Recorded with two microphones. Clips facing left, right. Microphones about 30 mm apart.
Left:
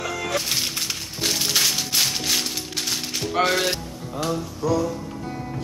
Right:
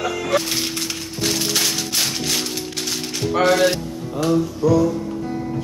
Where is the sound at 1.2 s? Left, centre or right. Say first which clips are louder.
Right 1 dB; centre.